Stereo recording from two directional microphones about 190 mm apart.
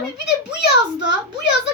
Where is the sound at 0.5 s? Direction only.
70° left (ahead or behind).